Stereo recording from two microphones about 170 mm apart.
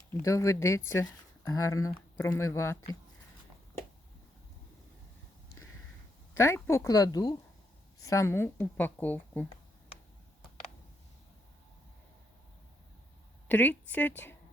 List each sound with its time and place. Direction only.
0.1 s a woman's voice: 20° left (ahead or behind)
6.3 s a woman's voice: 15° left (ahead or behind)
13.5 s a woman's voice: 10° left (ahead or behind)